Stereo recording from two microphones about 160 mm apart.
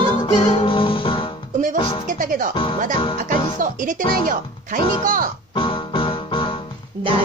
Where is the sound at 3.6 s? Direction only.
55° right (ahead or behind).